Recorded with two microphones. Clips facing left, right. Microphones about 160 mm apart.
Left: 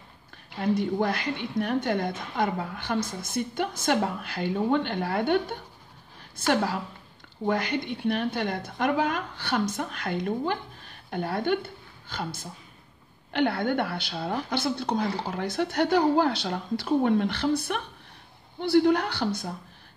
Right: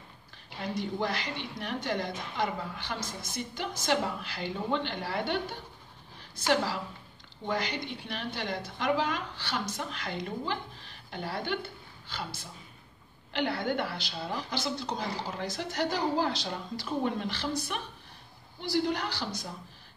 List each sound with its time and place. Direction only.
0.6 s a woman's voice: 50° left (ahead or behind)